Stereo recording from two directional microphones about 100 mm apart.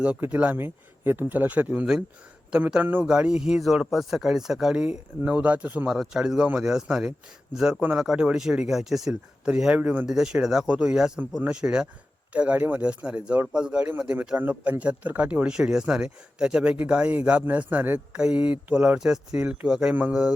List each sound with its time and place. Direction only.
0.0 s a man's voice: 10° right (ahead or behind)